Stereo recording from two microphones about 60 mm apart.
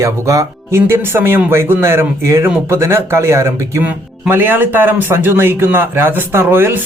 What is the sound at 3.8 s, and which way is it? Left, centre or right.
Speech, right.